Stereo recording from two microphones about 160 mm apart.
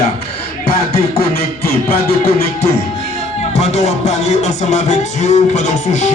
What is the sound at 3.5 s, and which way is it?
Music, 45° left (ahead or behind).